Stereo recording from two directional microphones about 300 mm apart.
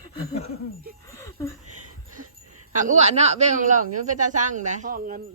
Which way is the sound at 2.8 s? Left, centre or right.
Right.